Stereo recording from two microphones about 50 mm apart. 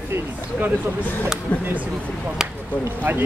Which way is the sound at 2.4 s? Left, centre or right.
Centre.